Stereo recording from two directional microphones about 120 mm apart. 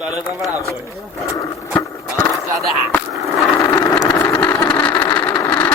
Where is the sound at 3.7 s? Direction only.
25° left (ahead or behind).